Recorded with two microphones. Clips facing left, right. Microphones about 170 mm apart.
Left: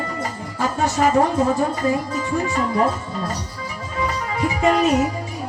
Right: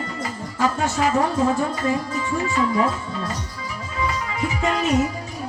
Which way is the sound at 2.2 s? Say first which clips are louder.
Left 2 dB; 40° left (ahead or behind).